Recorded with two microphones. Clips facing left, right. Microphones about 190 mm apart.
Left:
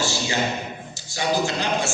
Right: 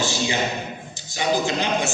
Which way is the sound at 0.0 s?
15° right (ahead or behind).